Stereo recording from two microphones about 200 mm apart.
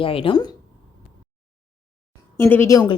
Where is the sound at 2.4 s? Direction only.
10° left (ahead or behind).